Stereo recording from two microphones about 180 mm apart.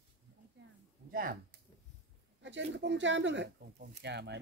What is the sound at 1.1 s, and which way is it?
Speech, 50° right (ahead or behind).